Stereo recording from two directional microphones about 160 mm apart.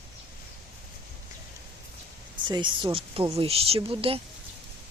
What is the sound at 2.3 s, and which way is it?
Speech, 30° right (ahead or behind).